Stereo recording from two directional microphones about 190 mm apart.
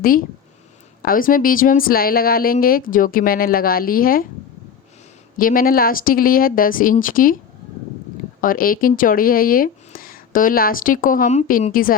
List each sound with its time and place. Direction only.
0.0 s speech: 50° left (ahead or behind)
5.4 s speech: 50° left (ahead or behind)
8.4 s speech: 50° left (ahead or behind)